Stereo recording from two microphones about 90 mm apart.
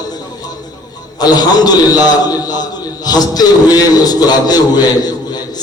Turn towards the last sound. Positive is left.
turn(degrees=50)  # may be behind; listen again after turning